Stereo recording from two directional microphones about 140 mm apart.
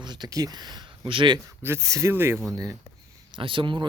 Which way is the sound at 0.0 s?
30° right (ahead or behind).